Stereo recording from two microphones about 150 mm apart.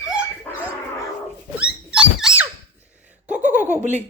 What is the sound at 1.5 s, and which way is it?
Rodents, 5° right (ahead or behind).